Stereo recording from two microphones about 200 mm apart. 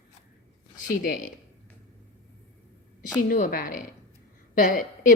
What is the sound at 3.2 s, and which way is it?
Speech, 40° left (ahead or behind).